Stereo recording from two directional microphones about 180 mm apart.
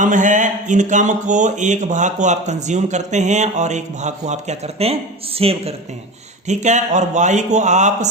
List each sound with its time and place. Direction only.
0.0 s speech: 45° right (ahead or behind)